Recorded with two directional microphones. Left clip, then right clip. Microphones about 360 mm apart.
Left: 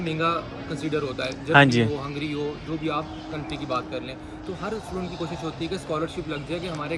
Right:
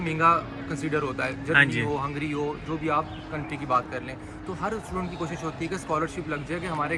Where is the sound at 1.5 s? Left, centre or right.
Centre.